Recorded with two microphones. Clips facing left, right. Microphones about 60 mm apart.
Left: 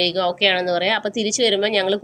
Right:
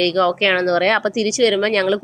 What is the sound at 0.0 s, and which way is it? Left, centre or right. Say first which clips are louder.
A woman's voice: right 3 dB; right.